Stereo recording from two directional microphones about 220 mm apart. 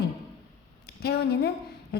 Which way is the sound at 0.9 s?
45° left (ahead or behind).